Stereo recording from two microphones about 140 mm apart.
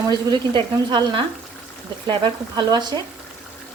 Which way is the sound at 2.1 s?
30° right (ahead or behind).